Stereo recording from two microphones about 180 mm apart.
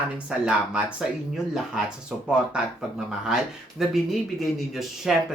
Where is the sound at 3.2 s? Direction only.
5° right (ahead or behind).